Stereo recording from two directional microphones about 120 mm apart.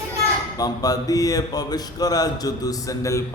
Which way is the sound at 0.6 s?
30° left (ahead or behind).